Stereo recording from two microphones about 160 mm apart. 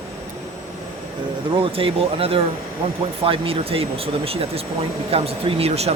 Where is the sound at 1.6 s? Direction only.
35° right (ahead or behind).